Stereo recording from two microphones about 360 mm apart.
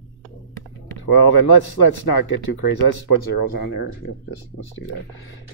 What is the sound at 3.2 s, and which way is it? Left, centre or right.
Speech, left.